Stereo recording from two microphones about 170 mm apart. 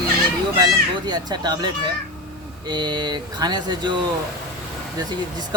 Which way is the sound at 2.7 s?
25° right (ahead or behind).